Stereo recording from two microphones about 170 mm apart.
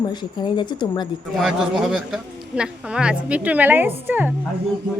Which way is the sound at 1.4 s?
Centre (ahead or behind).